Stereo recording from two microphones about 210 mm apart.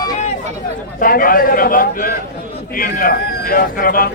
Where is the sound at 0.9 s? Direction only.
40° left (ahead or behind).